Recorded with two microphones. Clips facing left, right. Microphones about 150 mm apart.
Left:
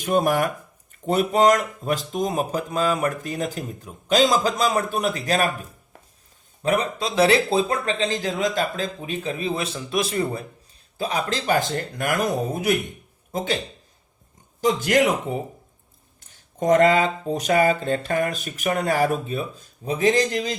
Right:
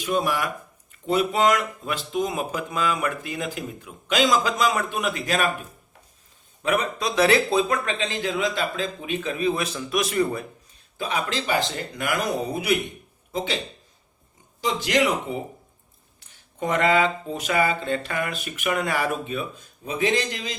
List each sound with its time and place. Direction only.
0.0 s speech: 45° left (ahead or behind)
6.6 s speech: 35° left (ahead or behind)
14.6 s speech: 45° left (ahead or behind)